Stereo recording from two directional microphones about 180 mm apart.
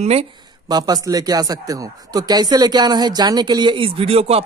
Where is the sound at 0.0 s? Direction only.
35° right (ahead or behind).